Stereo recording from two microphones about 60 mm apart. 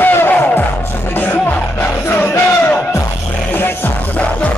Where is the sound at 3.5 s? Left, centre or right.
Left.